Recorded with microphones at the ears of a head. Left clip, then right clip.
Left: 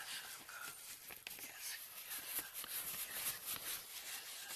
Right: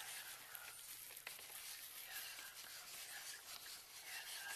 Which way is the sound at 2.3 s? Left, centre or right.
Left.